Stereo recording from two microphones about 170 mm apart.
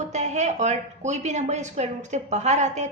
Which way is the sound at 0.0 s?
40° right (ahead or behind).